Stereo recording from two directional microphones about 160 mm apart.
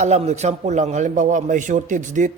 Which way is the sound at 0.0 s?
45° right (ahead or behind).